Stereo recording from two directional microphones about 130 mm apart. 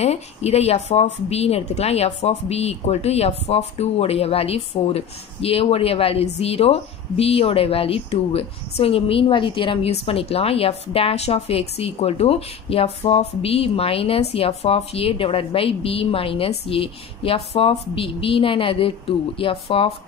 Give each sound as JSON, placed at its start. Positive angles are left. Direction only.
{"t": 0.0, "sound": "a woman's voice", "side_deg": 55}